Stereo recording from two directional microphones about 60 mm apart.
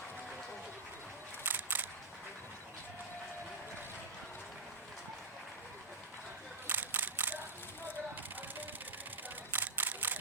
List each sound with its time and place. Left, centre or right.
1.5 s single-lens reflex camera: right
6.7 s camera: right
9.5 s camera: right